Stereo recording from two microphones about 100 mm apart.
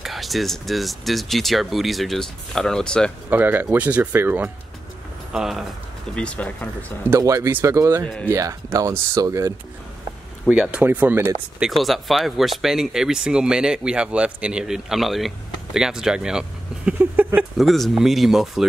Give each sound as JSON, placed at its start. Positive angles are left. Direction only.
{"t": 0.0, "sound": "speech", "side_deg": 0}
{"t": 3.3, "sound": "speech", "side_deg": -20}
{"t": 5.3, "sound": "speech", "side_deg": -5}
{"t": 6.1, "sound": "speech", "side_deg": 10}
{"t": 7.1, "sound": "speech", "side_deg": -30}
{"t": 8.0, "sound": "speech", "side_deg": 10}
{"t": 8.3, "sound": "speech", "side_deg": -30}
{"t": 10.5, "sound": "speech", "side_deg": -10}
{"t": 11.6, "sound": "speech", "side_deg": 0}
{"t": 17.0, "sound": "speech", "side_deg": -15}
{"t": 17.6, "sound": "speech", "side_deg": 0}